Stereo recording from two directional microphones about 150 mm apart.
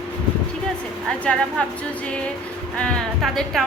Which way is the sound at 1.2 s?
10° left (ahead or behind).